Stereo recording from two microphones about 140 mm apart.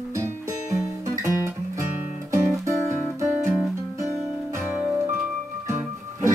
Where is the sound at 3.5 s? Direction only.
20° left (ahead or behind).